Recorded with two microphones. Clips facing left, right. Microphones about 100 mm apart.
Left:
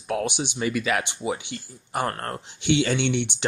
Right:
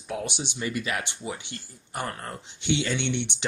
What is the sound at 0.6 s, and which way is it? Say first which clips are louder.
Speech: left 5 dB; 90° left.